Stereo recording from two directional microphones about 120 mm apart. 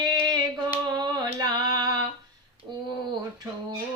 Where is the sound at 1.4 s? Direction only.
30° right (ahead or behind).